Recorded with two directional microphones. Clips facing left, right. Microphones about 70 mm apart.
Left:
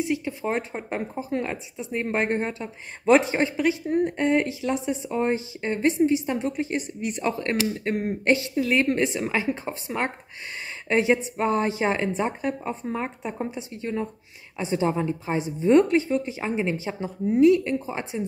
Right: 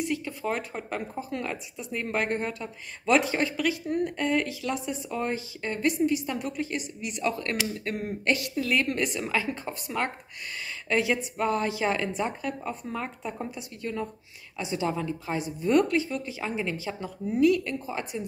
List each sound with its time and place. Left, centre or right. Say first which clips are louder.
0.0 s speech: left 4 dB; left
8.5 s speech: left 4 dB; left